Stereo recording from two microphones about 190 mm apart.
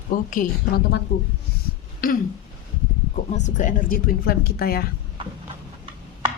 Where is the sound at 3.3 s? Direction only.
40° left (ahead or behind).